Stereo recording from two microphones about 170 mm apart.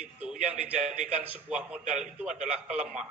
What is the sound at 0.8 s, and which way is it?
Speech, 45° right (ahead or behind).